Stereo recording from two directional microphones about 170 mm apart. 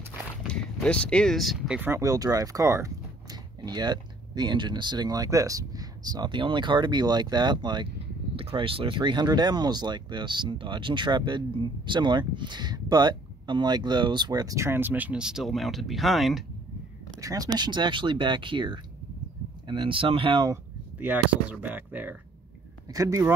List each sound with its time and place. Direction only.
0.4 s speech: centre (ahead or behind)
17.2 s speech: 20° right (ahead or behind)
21.0 s speech: 10° right (ahead or behind)